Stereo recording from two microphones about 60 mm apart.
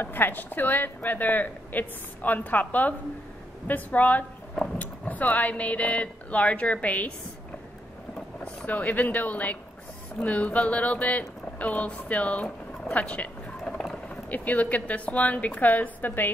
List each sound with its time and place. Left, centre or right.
0.0 s a woman's voice: left
8.5 s speech: left
12.9 s a sound: left
14.0 s speech: left